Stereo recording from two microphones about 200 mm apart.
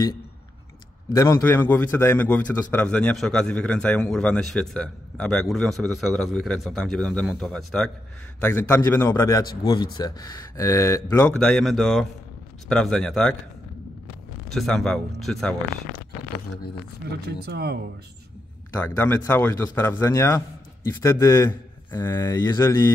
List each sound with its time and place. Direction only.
1.0 s a man's voice: 15° left (ahead or behind)
14.5 s a man's voice: centre (ahead or behind)
17.3 s speech: 55° right (ahead or behind)
18.7 s a man's voice: 10° left (ahead or behind)